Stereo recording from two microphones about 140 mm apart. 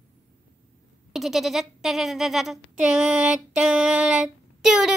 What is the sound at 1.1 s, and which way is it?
Speech, centre (ahead or behind).